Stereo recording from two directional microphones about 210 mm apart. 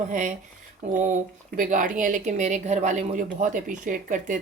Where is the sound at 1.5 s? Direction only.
40° right (ahead or behind).